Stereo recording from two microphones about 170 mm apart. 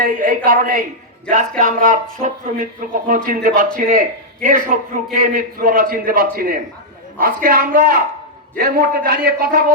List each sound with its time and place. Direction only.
0.0 s a man's voice: 55° right (ahead or behind)